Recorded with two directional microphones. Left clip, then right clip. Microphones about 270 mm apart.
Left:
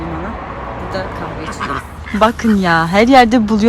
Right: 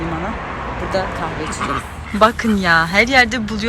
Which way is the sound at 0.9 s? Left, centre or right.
Centre.